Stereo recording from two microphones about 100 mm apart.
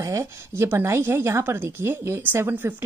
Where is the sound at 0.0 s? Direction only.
30° right (ahead or behind).